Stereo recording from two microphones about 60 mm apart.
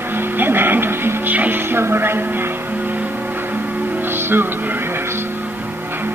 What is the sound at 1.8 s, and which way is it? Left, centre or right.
Music, right.